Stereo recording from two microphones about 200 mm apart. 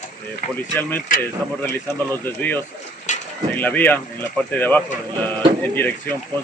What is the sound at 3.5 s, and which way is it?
Speech, 10° left (ahead or behind).